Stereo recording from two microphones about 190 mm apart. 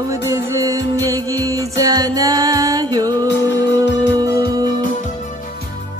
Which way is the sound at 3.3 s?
65° left (ahead or behind).